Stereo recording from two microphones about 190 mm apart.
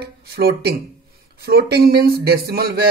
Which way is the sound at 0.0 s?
55° right (ahead or behind).